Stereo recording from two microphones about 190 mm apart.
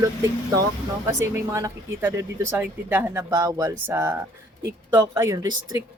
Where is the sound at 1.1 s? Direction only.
15° right (ahead or behind).